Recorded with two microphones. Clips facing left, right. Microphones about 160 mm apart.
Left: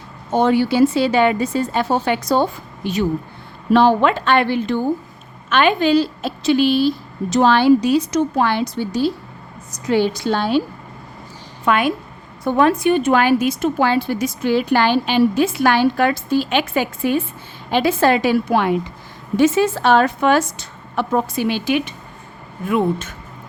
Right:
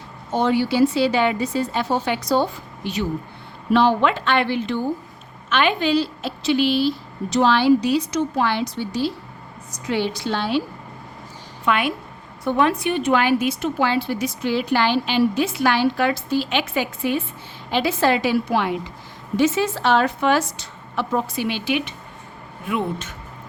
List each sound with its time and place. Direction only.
0.3 s a woman's voice: 50° left (ahead or behind)
11.6 s a woman's voice: 45° left (ahead or behind)